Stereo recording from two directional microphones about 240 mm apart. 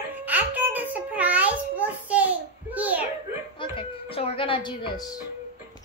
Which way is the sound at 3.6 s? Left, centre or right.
Left.